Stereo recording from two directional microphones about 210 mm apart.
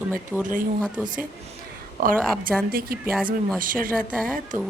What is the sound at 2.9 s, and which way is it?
A woman's voice, 45° right (ahead or behind).